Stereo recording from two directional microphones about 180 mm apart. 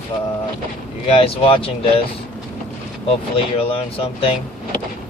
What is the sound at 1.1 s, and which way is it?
Speech, 30° left (ahead or behind).